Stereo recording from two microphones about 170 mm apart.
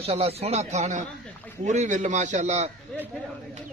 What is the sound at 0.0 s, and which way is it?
A man's voice, 35° right (ahead or behind).